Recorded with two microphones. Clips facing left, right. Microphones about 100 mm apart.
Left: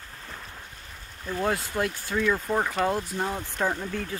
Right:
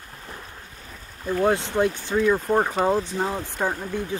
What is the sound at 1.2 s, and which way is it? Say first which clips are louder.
Speech: right 6 dB; 25° right (ahead or behind).